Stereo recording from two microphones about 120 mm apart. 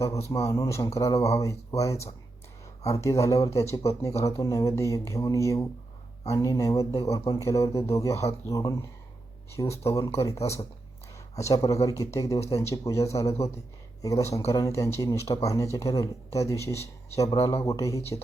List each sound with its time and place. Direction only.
0.3 s speech: 25° left (ahead or behind)